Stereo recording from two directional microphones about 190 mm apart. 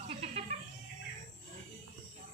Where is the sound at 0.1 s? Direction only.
35° right (ahead or behind).